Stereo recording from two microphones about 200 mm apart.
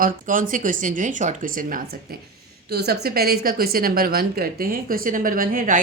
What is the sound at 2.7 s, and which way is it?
A woman's voice, 55° right (ahead or behind).